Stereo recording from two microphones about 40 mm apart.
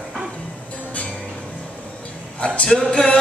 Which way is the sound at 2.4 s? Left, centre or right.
Left.